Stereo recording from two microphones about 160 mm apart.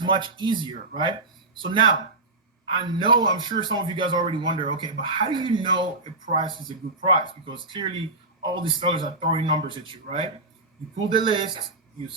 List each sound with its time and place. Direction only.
0.0 s a man's voice: 30° right (ahead or behind)